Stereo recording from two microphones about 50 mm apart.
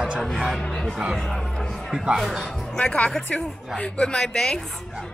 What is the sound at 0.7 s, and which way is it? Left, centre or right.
A woman's voice, centre.